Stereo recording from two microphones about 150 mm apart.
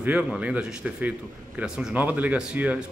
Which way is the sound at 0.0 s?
10° right (ahead or behind).